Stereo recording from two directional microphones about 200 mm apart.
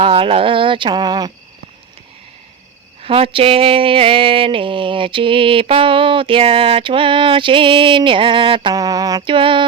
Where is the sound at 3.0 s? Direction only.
30° right (ahead or behind).